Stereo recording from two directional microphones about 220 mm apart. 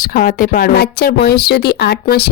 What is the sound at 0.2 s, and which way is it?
A woman's voice, 40° left (ahead or behind).